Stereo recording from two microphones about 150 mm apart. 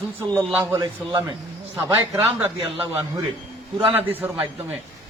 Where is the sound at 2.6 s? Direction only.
25° right (ahead or behind).